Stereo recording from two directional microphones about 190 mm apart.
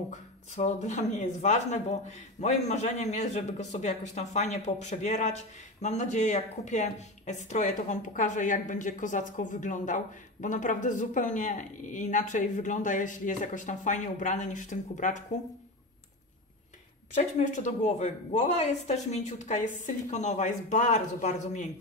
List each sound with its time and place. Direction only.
0.1 s speech: 35° left (ahead or behind)
17.1 s speech: 40° left (ahead or behind)